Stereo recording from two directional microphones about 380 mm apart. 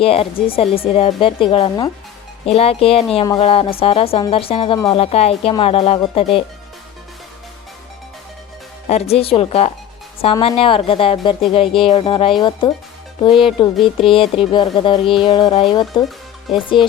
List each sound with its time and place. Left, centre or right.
0.0 s speech: centre
8.9 s speech: centre
16.0 s music: centre